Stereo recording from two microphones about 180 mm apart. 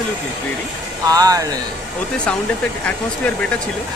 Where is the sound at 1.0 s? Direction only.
20° right (ahead or behind).